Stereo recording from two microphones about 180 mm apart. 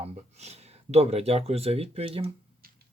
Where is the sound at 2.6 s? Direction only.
55° right (ahead or behind).